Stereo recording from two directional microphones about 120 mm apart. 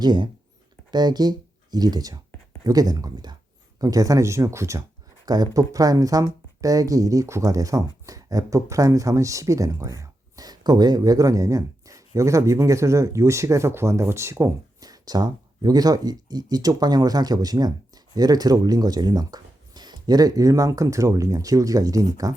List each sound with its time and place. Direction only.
0.0 s speech: 40° right (ahead or behind)